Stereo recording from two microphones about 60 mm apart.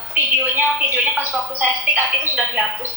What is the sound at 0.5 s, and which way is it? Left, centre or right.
Speech, right.